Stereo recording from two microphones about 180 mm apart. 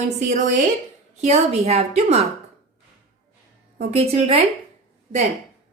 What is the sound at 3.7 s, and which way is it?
Speech, 35° right (ahead or behind).